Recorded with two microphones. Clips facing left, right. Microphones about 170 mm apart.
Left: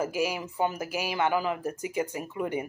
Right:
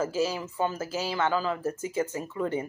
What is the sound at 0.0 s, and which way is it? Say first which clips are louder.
A woman's voice: right 1 dB; 15° left (ahead or behind).